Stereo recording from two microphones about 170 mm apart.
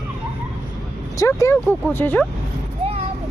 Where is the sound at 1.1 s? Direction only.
20° left (ahead or behind).